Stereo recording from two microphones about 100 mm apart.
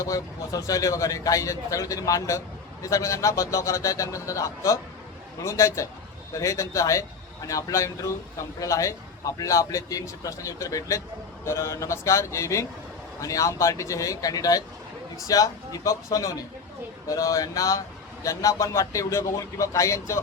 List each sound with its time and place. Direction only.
0.0 s a man's voice: 35° left (ahead or behind)